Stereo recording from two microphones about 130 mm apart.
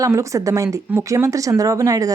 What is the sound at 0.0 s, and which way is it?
Speech, 25° right (ahead or behind).